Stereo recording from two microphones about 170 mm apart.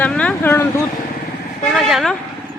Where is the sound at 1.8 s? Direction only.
Centre (ahead or behind).